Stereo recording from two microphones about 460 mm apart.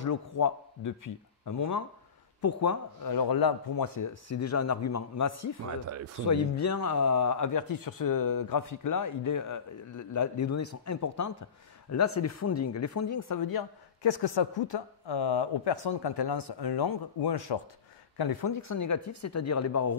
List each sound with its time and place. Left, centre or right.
0.0 s speech: left
6.6 s speech: left
14.0 s speech: left
18.6 s speech: left